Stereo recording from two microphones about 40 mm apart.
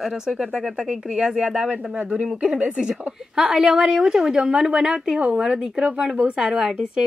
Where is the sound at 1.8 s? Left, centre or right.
Right.